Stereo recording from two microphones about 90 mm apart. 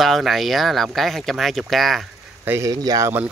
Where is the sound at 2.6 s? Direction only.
45° right (ahead or behind).